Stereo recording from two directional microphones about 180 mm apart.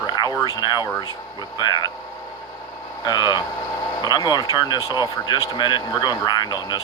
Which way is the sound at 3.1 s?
25° left (ahead or behind).